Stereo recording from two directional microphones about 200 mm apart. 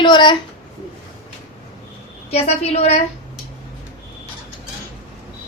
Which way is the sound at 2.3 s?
30° left (ahead or behind).